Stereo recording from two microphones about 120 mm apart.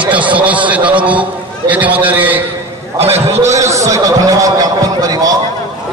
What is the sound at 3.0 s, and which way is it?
Speech, 60° right (ahead or behind).